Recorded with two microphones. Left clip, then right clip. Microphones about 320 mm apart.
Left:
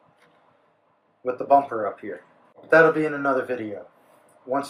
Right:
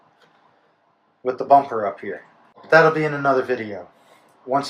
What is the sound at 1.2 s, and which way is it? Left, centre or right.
Speech, right.